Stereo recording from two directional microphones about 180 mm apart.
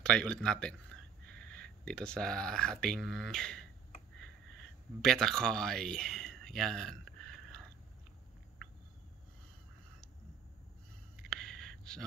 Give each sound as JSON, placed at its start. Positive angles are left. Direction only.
{"t": 0.0, "sound": "speech", "side_deg": 5}
{"t": 5.0, "sound": "speech", "side_deg": 5}
{"t": 11.2, "sound": "a sound", "side_deg": 0}